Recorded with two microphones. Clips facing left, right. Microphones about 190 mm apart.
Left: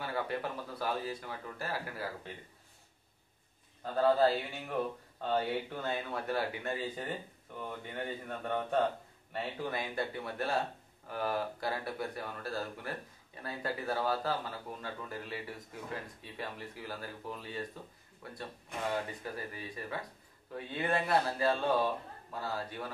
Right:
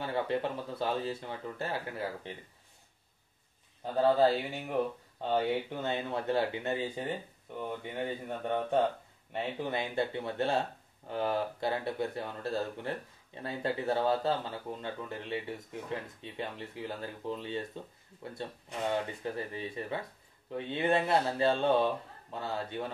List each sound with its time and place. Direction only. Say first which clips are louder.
0.0 s speech: right 4 dB; 25° right (ahead or behind)
3.8 s speech: right 2 dB; 20° right (ahead or behind)
8.3 s speech: right 2 dB; 20° right (ahead or behind)